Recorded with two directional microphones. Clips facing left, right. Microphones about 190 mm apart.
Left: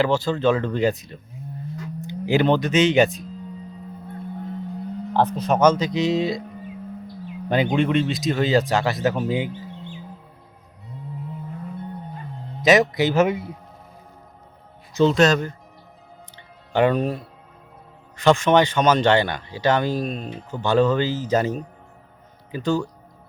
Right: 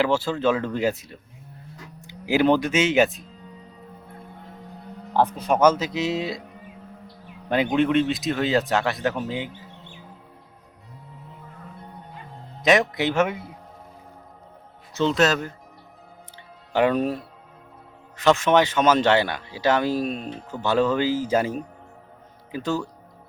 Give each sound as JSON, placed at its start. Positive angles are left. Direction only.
{"t": 0.0, "sound": "speech", "side_deg": -5}
{"t": 5.1, "sound": "speech", "side_deg": -10}
{"t": 7.5, "sound": "speech", "side_deg": 0}
{"t": 12.6, "sound": "speech", "side_deg": 0}
{"t": 13.1, "sound": "a man's voice", "side_deg": 30}
{"t": 15.1, "sound": "speech", "side_deg": -5}
{"t": 16.7, "sound": "speech", "side_deg": -5}
{"t": 18.2, "sound": "speech", "side_deg": -5}